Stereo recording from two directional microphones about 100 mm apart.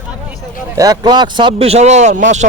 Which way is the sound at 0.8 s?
40° right (ahead or behind).